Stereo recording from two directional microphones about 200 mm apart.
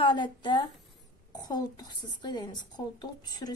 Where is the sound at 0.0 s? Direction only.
25° left (ahead or behind).